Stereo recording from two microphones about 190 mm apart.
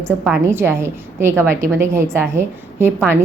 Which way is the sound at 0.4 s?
10° right (ahead or behind).